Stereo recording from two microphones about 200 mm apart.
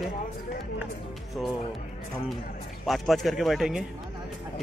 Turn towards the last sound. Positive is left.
turn(degrees=0)  # may be behind; listen again after turning